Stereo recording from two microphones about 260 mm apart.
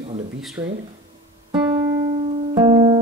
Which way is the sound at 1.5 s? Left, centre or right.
Centre.